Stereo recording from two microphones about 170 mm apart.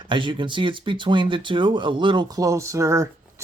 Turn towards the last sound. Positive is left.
turn(degrees=-20)  # may be behind; listen again after turning